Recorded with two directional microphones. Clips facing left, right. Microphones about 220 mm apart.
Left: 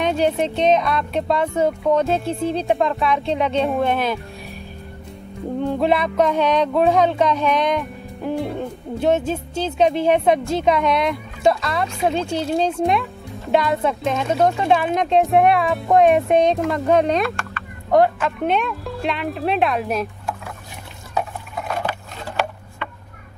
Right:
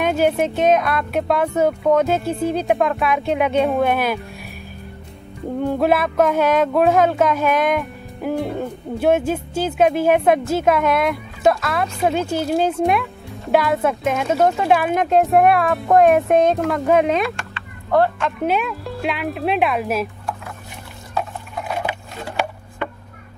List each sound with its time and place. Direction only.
0.0 s speech: 5° right (ahead or behind)
5.6 s speech: 5° right (ahead or behind)
21.6 s a sound: 10° right (ahead or behind)